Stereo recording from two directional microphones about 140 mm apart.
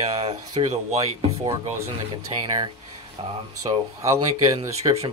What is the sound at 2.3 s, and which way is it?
Speech, 30° right (ahead or behind).